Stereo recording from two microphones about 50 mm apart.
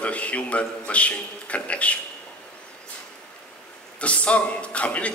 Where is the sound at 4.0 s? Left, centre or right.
Left.